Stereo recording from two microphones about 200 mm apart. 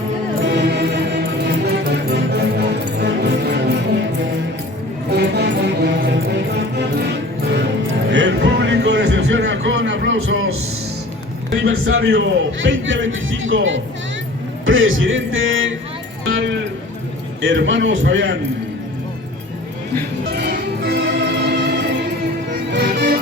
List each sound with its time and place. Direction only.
0.4 s music: 60° right (ahead or behind)
5.1 s music: 55° right (ahead or behind); by 10.5 s 80° right
11.5 s a man's voice: 80° right
17.4 s a man's voice: 70° right (ahead or behind)
20.3 s music: 55° right (ahead or behind)